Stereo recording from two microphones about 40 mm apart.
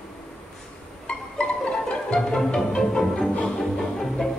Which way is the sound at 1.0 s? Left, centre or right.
Left.